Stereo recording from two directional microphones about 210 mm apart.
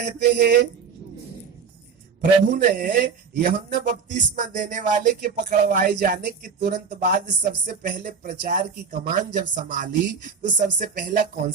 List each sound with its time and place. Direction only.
0.0 s speech: 50° right (ahead or behind)
2.5 s speech: 40° right (ahead or behind)